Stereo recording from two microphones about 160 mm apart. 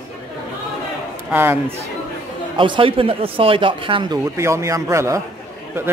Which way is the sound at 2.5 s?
30° right (ahead or behind).